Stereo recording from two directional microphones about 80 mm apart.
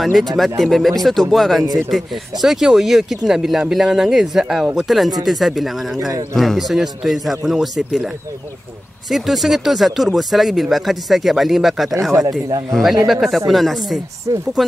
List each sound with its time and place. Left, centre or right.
0.0 s speech: centre
5.9 s speech: right
6.3 s speech: centre
9.1 s speech: centre
12.3 s speech: right
12.7 s speech: centre